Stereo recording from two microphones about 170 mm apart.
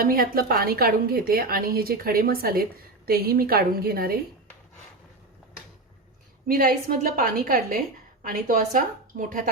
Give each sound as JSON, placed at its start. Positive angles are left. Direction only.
{"t": 0.0, "sound": "a woman's voice", "side_deg": -60}
{"t": 6.5, "sound": "a woman's voice", "side_deg": -55}